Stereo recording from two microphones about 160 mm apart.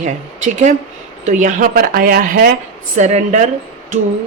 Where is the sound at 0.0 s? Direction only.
50° right (ahead or behind); by 2.5 s 65° right (ahead or behind).